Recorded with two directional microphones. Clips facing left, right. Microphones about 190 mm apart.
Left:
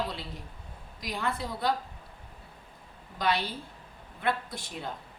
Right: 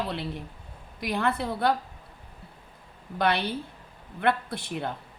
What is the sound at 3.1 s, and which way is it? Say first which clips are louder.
A woman's voice: right 4 dB; 60° right (ahead or behind).